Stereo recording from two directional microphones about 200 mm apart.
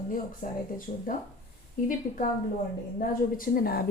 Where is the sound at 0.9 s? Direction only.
40° left (ahead or behind).